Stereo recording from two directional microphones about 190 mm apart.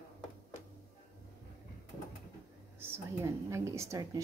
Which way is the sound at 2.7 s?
10° right (ahead or behind).